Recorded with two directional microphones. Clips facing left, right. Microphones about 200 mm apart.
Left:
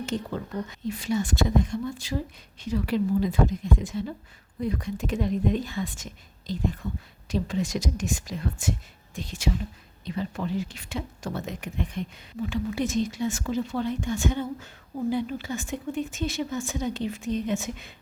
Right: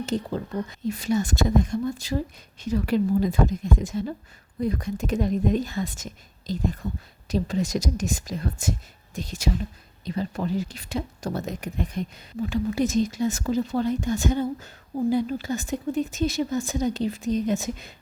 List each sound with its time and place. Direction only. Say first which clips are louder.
0.0 s a woman's voice: right 3 dB; 35° right (ahead or behind)